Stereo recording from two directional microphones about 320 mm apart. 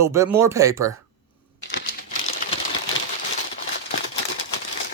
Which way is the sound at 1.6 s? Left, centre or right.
Left.